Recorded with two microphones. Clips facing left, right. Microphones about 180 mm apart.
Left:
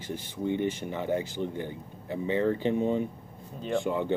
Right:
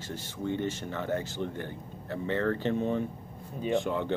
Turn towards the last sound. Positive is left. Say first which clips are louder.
# left 2 dB
turn(degrees=15)  # may be behind; listen again after turning